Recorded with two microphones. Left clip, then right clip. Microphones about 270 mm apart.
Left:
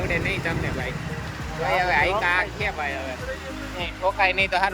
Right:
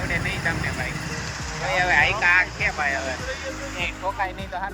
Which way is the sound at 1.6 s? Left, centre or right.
Centre.